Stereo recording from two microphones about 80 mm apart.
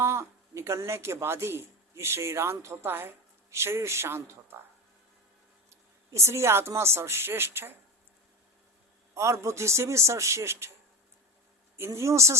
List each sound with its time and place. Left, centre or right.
0.0 s speech: right
6.1 s a woman's voice: right
9.1 s a woman's voice: right
11.9 s a woman's voice: right